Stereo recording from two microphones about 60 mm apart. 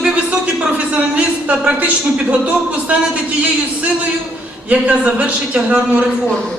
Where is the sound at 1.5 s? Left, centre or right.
Right.